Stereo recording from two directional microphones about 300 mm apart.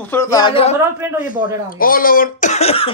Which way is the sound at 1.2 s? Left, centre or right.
Left.